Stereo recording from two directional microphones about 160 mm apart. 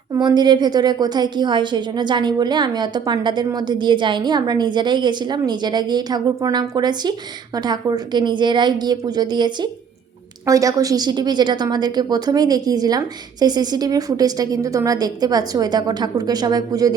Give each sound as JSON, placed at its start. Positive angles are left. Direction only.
{"t": 0.2, "sound": "a woman's voice", "side_deg": -25}